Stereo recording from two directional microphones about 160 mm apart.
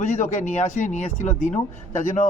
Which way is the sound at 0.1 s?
50° left (ahead or behind).